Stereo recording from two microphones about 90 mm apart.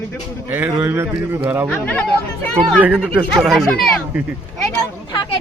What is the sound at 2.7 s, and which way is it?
Speech, 20° right (ahead or behind).